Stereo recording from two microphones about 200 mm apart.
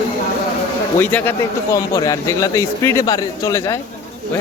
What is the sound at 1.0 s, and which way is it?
A man's voice, 10° left (ahead or behind).